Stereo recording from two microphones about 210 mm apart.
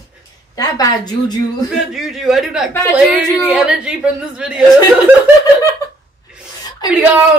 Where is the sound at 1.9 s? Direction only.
Centre (ahead or behind).